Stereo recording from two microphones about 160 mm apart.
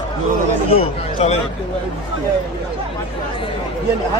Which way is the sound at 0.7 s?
35° left (ahead or behind).